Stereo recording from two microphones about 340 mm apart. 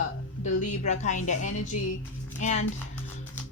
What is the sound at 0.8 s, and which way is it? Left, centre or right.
Speech, left.